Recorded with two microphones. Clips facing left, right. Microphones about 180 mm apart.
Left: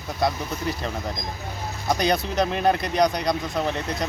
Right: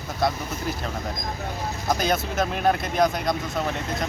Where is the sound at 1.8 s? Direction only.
Centre (ahead or behind).